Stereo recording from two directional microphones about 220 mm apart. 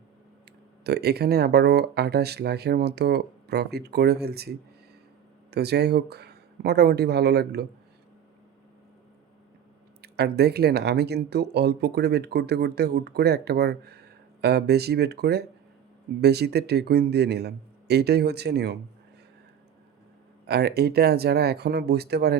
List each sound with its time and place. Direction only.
0.9 s speech: 45° right (ahead or behind)
10.0 s speech: 45° right (ahead or behind)
20.5 s speech: 45° right (ahead or behind)